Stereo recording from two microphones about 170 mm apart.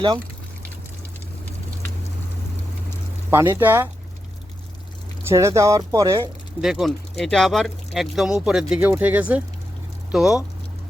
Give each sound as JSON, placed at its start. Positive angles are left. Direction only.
{"t": 3.2, "sound": "speech", "side_deg": -15}
{"t": 5.3, "sound": "speech", "side_deg": -15}
{"t": 6.6, "sound": "speech", "side_deg": 0}